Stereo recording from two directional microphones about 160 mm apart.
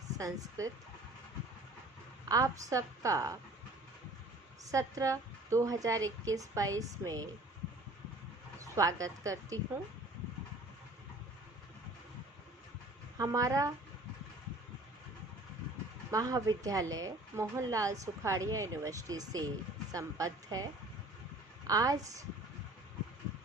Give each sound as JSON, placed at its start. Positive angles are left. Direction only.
{"t": 0.2, "sound": "a woman's voice", "side_deg": -20}
{"t": 2.3, "sound": "a woman's voice", "side_deg": -20}
{"t": 4.7, "sound": "a woman's voice", "side_deg": -20}
{"t": 8.6, "sound": "a woman's voice", "side_deg": -20}
{"t": 13.1, "sound": "a woman's voice", "side_deg": -20}
{"t": 16.1, "sound": "a woman's voice", "side_deg": -20}
{"t": 21.7, "sound": "a woman's voice", "side_deg": -20}